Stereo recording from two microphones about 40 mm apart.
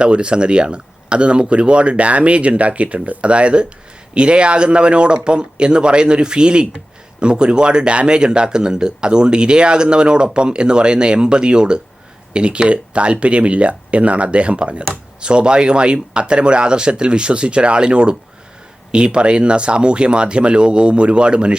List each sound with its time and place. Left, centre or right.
0.0 s speech: right